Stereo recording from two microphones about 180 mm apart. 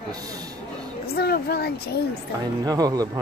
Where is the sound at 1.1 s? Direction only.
60° left (ahead or behind).